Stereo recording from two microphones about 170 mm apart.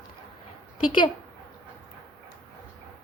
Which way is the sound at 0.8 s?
25° left (ahead or behind).